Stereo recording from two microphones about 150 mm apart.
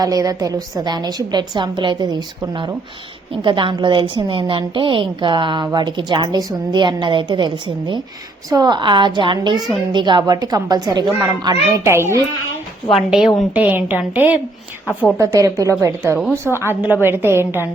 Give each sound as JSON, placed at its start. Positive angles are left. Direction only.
{"t": 0.0, "sound": "a woman's voice", "side_deg": -25}
{"t": 11.9, "sound": "a woman's voice", "side_deg": -15}
{"t": 12.9, "sound": "a woman's voice", "side_deg": 0}
{"t": 16.4, "sound": "a woman's voice", "side_deg": -5}